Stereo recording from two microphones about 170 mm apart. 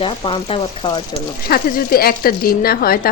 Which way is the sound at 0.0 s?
30° left (ahead or behind).